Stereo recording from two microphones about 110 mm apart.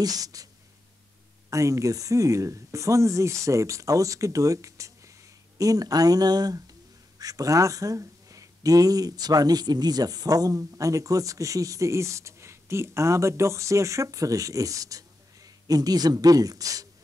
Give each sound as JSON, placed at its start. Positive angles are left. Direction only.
{"t": 0.0, "sound": "speech", "side_deg": -35}
{"t": 1.5, "sound": "speech", "side_deg": -30}